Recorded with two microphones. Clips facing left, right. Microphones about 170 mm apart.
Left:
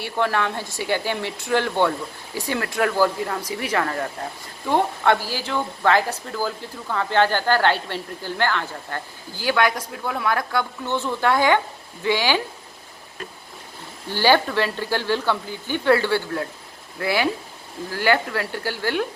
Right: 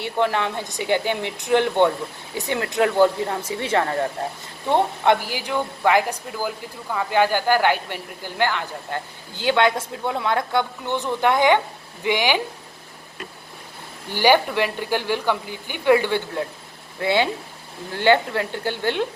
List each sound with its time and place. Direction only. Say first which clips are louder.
0.0 s a woman's voice: right 1 dB; 20° right (ahead or behind)
4.7 s a woman's voice: right 1 dB; 20° right (ahead or behind)
14.1 s a woman's voice: right 1 dB; 15° right (ahead or behind)